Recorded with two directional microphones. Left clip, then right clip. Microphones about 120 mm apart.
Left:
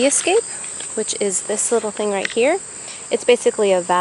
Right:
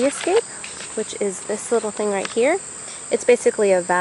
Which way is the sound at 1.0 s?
15° left (ahead or behind).